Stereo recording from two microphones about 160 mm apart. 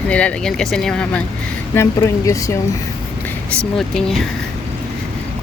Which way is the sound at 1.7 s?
20° left (ahead or behind).